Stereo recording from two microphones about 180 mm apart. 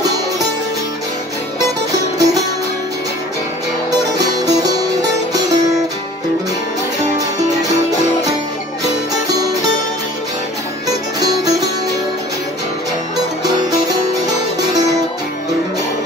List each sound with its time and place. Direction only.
1.9 s music: 20° right (ahead or behind)
4.0 s music: 20° right (ahead or behind)
10.9 s music: 20° right (ahead or behind)